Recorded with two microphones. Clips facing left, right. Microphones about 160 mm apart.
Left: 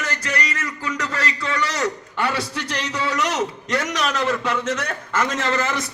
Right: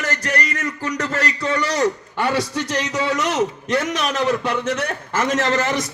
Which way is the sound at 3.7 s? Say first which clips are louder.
Right 2 dB; 25° right (ahead or behind).